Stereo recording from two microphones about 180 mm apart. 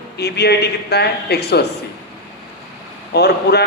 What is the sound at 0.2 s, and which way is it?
A man's voice, 65° left (ahead or behind).